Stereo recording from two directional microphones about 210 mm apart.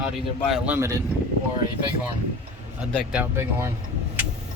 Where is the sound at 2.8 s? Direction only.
10° right (ahead or behind).